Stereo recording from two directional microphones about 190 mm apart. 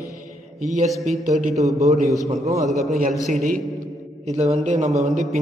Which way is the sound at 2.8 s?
45° right (ahead or behind).